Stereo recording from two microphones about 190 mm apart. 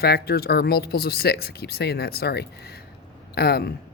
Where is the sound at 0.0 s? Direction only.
55° left (ahead or behind).